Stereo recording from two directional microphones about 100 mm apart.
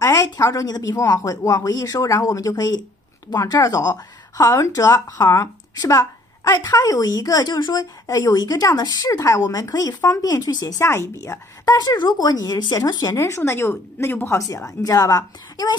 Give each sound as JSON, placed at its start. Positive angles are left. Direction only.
{"t": 0.0, "sound": "speech", "side_deg": 35}
{"t": 10.8, "sound": "speech", "side_deg": 30}
{"t": 13.2, "sound": "speech", "side_deg": 25}
{"t": 14.5, "sound": "speech", "side_deg": 35}